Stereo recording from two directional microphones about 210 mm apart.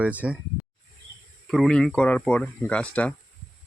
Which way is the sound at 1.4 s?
Centre (ahead or behind).